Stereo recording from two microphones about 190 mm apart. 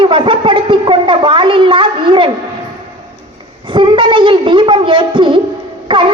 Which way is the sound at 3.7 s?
25° right (ahead or behind).